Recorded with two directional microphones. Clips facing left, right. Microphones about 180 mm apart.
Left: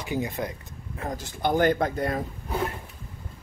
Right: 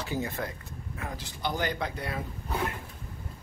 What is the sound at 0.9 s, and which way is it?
A man's voice, 45° left (ahead or behind).